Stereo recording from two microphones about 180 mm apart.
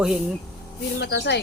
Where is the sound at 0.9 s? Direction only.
75° left (ahead or behind).